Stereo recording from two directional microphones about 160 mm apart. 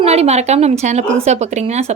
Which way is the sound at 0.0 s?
40° right (ahead or behind).